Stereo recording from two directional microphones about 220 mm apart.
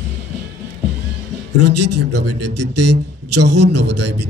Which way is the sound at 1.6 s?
90° right.